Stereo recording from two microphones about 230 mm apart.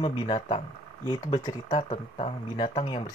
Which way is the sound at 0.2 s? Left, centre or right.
Left.